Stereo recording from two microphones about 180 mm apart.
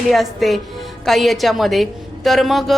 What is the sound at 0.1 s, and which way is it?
Speech, centre (ahead or behind).